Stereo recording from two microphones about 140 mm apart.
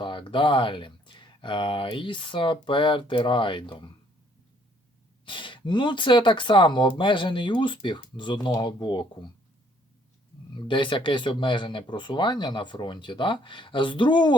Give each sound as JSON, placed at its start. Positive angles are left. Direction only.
{"t": 0.0, "sound": "speech", "side_deg": 35}
{"t": 5.2, "sound": "speech", "side_deg": 35}
{"t": 10.5, "sound": "speech", "side_deg": 35}